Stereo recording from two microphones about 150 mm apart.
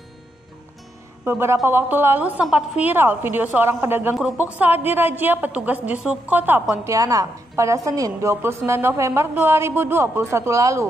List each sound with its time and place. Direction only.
1.2 s a woman's voice: 15° right (ahead or behind)
6.8 s a woman's voice: 20° right (ahead or behind)